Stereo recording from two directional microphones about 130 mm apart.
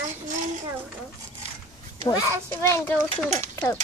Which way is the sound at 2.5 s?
20° left (ahead or behind).